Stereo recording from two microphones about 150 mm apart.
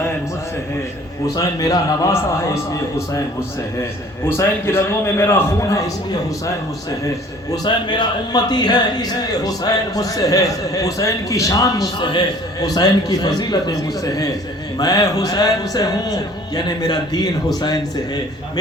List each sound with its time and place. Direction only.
1.4 s a man's voice: 25° left (ahead or behind)
4.3 s a man's voice: 15° left (ahead or behind)
7.5 s a man's voice: 30° left (ahead or behind)